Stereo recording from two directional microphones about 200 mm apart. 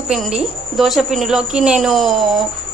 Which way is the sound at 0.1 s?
Centre (ahead or behind).